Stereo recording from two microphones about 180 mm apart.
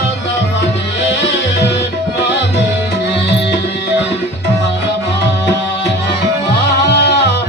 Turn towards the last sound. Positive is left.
turn(degrees=70)  # may be behind; listen again after turning